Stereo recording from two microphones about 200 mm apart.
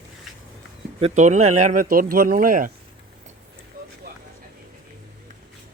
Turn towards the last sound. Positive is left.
turn(degrees=-45)  # may be behind; listen again after turning